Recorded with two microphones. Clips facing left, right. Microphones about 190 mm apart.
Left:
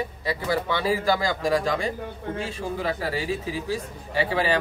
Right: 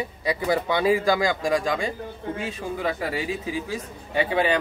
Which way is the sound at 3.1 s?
35° left (ahead or behind).